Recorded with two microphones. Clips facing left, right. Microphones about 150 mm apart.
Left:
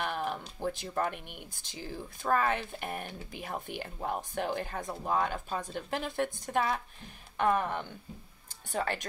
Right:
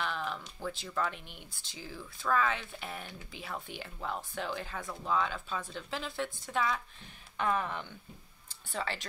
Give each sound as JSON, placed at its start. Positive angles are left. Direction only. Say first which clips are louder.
{"t": 0.0, "sound": "music", "louder": "left 3 dB", "side_deg": 50}
{"t": 0.6, "sound": "speech", "louder": "left 5 dB", "side_deg": 20}
{"t": 0.9, "sound": "speech", "louder": "left 2 dB", "side_deg": 50}
{"t": 8.7, "sound": "speech", "louder": "left 4 dB", "side_deg": 50}